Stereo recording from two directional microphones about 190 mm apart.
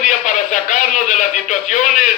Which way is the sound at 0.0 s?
40° left (ahead or behind).